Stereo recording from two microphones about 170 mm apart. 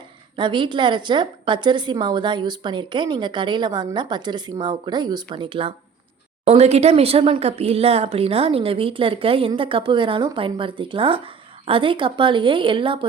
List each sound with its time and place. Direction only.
0.3 s a woman's voice: 30° right (ahead or behind)